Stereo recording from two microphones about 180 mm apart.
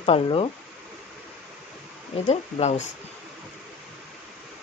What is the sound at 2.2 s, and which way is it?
Speech, 40° left (ahead or behind).